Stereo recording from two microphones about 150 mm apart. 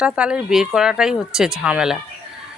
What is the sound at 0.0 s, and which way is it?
Speech, 5° right (ahead or behind).